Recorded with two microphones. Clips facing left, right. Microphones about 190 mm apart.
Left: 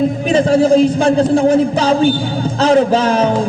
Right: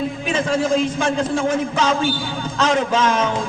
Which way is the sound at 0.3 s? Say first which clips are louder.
Left 8 dB; 35° left (ahead or behind).